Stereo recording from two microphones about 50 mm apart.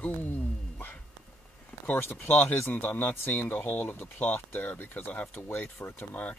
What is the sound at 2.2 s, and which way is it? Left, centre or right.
Speech, left.